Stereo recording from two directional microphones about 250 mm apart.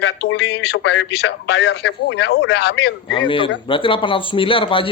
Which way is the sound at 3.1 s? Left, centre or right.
Centre.